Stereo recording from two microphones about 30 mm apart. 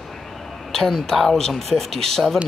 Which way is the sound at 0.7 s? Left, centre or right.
Centre.